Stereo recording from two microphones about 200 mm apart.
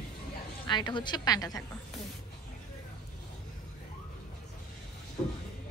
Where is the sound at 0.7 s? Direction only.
20° left (ahead or behind).